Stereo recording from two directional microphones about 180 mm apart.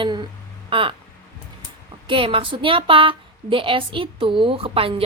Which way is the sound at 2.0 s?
30° right (ahead or behind).